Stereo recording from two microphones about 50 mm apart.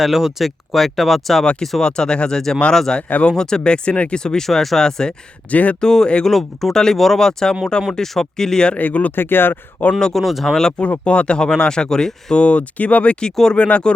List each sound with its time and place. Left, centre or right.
0.0 s speech: centre
1.8 s speech: centre
4.4 s speech: centre
5.5 s speech: left
5.8 s speech: centre
6.2 s speech: centre
8.7 s speech: left
9.1 s speech: left
10.0 s speech: centre
10.7 s speech: left
13.6 s speech: left